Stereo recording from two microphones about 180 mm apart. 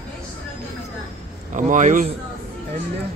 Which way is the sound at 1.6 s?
45° right (ahead or behind).